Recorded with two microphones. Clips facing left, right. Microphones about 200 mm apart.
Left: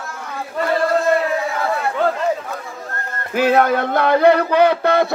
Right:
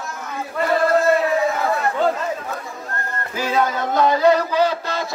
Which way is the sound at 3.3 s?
60° left (ahead or behind).